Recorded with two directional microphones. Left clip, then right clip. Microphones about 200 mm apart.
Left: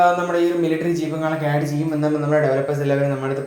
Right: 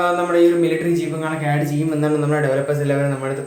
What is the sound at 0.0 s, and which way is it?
A man's voice, centre (ahead or behind).